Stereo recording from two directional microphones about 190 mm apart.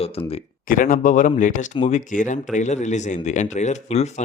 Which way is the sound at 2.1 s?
40° left (ahead or behind).